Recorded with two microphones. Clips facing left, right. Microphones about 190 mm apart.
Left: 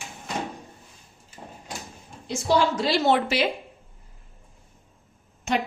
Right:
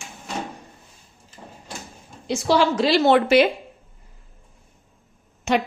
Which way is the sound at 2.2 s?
85° right.